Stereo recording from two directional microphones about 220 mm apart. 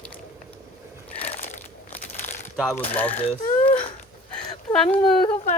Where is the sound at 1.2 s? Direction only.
30° left (ahead or behind).